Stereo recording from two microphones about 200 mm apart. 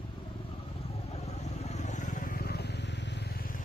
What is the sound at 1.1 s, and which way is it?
Vehicle, 35° left (ahead or behind).